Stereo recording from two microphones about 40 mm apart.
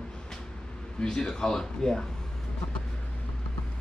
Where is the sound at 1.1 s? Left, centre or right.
Centre.